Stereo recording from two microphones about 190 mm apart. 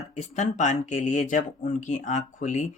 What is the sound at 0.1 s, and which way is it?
Speech, 40° left (ahead or behind).